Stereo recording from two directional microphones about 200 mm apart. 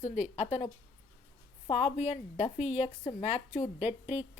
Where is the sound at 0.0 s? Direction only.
35° left (ahead or behind).